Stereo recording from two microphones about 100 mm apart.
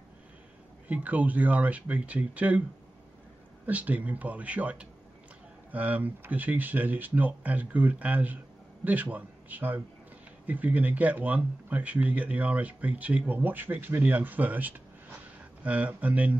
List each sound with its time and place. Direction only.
0.8 s speech: 15° right (ahead or behind)
3.6 s a man's voice: 15° right (ahead or behind)